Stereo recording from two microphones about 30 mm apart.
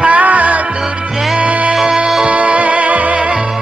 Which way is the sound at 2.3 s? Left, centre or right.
Right.